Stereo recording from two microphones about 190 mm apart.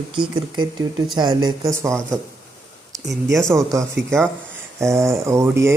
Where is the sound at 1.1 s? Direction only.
20° right (ahead or behind).